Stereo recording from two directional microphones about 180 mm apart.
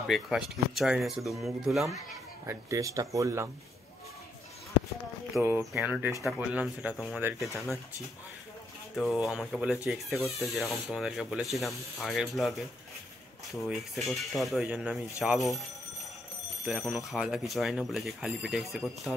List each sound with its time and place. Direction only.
0.0 s speech: centre (ahead or behind)
2.4 s speech: 15° right (ahead or behind)
5.6 s speech: centre (ahead or behind)
8.9 s speech: centre (ahead or behind)
16.6 s speech: centre (ahead or behind)